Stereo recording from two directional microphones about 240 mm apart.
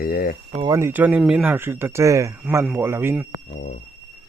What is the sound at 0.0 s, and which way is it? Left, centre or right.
Speech, left.